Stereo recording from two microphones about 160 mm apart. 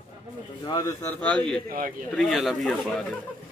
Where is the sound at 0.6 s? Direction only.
25° left (ahead or behind).